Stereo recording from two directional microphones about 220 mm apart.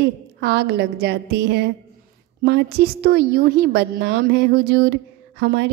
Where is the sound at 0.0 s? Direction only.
50° right (ahead or behind).